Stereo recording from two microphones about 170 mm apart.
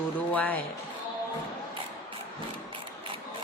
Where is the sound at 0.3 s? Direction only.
10° left (ahead or behind).